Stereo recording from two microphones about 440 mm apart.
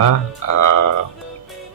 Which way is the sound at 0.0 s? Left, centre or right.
Left.